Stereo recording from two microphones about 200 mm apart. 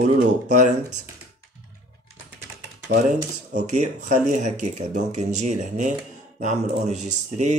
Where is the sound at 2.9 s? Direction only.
50° right (ahead or behind).